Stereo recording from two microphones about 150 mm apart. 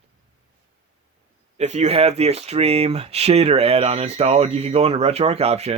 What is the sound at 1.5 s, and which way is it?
Speech, 50° right (ahead or behind).